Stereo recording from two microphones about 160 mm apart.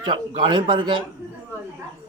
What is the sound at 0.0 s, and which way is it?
Speech, 30° right (ahead or behind).